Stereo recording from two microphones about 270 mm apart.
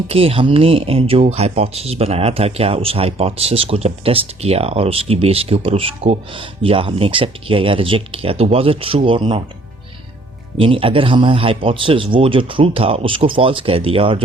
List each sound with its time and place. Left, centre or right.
0.1 s speech: right
10.6 s speech: centre